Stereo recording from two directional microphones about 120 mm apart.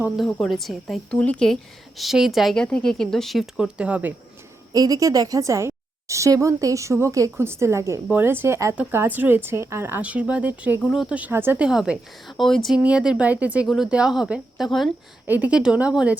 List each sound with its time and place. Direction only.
0.3 s a woman's voice: 5° left (ahead or behind)
2.0 s a woman's voice: centre (ahead or behind)
4.7 s a woman's voice: 30° right (ahead or behind); by 14.8 s centre (ahead or behind)
15.3 s a woman's voice: 10° right (ahead or behind)